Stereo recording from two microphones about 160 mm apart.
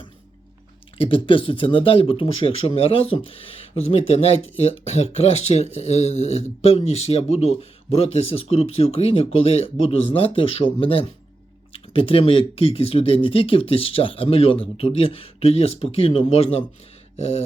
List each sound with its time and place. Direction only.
0.9 s speech: 35° left (ahead or behind)